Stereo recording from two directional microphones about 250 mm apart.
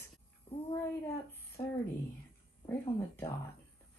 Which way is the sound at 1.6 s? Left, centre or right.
Centre.